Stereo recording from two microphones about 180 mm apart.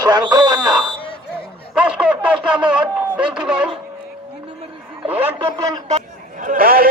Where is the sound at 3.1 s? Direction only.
5° right (ahead or behind).